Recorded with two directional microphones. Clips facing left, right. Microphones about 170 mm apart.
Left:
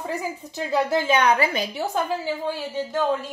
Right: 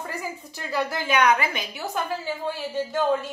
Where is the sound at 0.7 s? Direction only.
25° left (ahead or behind).